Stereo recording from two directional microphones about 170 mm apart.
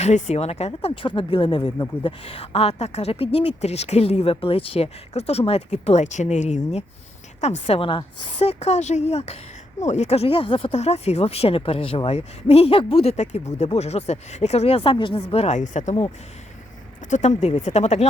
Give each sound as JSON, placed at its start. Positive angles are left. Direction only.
{"t": 0.0, "sound": "speech", "side_deg": 40}
{"t": 17.1, "sound": "speech", "side_deg": 45}